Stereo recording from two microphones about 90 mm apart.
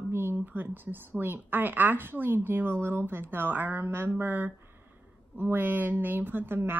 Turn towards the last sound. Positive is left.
turn(degrees=-25)  # may be behind; listen again after turning